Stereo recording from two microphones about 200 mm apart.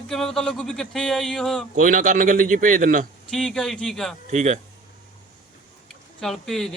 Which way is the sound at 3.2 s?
5° left (ahead or behind).